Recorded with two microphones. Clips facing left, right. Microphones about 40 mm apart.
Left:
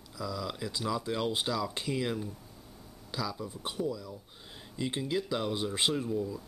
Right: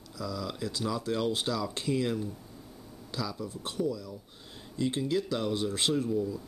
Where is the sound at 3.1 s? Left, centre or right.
Centre.